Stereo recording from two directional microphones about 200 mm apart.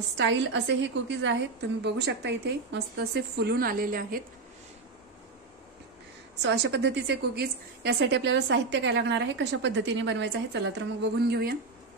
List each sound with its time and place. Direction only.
0.2 s a woman's voice: 60° right (ahead or behind); by 4.2 s 45° right (ahead or behind)
6.4 s a woman's voice: 60° right (ahead or behind)